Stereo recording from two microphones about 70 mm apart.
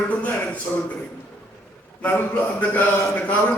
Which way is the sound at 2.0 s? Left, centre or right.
Left.